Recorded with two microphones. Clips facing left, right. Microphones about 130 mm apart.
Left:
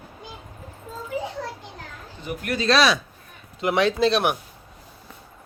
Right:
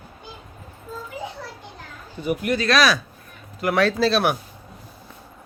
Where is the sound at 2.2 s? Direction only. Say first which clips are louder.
Right 9 dB; 10° right (ahead or behind).